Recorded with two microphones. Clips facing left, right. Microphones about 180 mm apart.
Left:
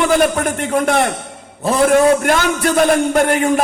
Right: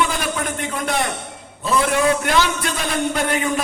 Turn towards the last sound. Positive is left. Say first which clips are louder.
# left 7 dB
turn(degrees=50)  # may be behind; listen again after turning